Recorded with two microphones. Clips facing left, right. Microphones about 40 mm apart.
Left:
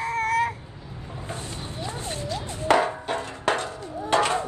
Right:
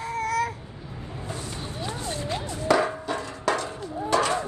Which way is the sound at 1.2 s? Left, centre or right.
Left.